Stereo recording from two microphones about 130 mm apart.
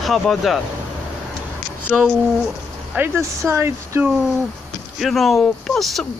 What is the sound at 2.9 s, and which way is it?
Speech, 20° right (ahead or behind).